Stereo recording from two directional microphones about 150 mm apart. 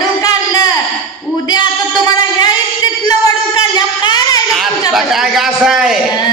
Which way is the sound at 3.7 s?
25° left (ahead or behind).